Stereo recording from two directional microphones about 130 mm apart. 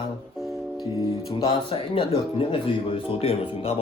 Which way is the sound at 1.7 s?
40° left (ahead or behind).